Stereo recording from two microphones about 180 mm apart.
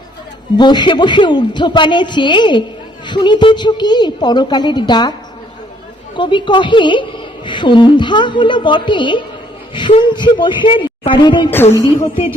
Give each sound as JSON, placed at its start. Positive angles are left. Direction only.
{"t": 0.5, "sound": "a woman's voice", "side_deg": 25}
{"t": 6.1, "sound": "a woman's voice", "side_deg": 25}